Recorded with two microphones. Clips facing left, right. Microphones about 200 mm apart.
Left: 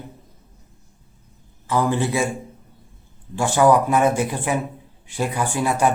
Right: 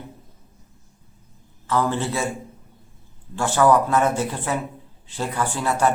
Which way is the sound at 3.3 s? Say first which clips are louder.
Left 2 dB; 15° left (ahead or behind).